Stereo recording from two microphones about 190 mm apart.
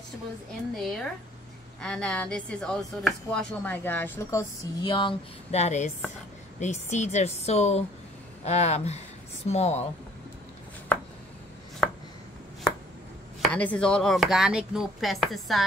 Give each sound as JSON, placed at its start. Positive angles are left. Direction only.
{"t": 0.7, "sound": "a woman's voice", "side_deg": 5}
{"t": 11.8, "sound": "chopping", "side_deg": 5}
{"t": 13.4, "sound": "speech", "side_deg": 5}